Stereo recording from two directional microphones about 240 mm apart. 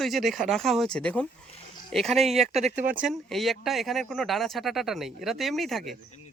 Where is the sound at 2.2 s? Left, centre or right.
Right.